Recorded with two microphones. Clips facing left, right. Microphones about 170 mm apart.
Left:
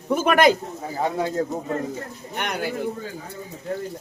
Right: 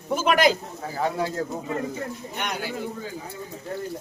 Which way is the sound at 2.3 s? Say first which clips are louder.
Left 5 dB; 55° left (ahead or behind).